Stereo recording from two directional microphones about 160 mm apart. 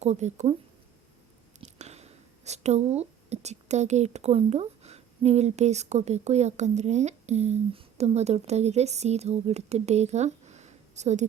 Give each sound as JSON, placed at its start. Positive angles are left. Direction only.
{"t": 0.0, "sound": "speech", "side_deg": -45}
{"t": 1.6, "sound": "speech", "side_deg": -45}